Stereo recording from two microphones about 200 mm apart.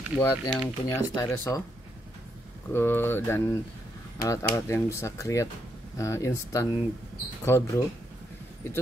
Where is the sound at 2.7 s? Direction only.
10° left (ahead or behind).